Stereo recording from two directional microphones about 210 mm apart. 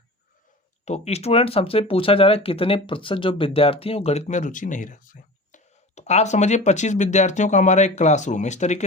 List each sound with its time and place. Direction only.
0.9 s speech: 30° left (ahead or behind)